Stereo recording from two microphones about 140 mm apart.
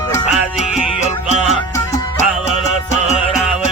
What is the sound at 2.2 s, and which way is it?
Music, 50° left (ahead or behind).